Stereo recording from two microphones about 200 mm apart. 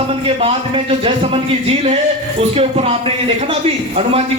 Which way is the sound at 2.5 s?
30° right (ahead or behind).